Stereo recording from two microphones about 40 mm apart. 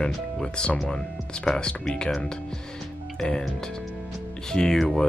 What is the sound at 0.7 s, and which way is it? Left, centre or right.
Speech, centre.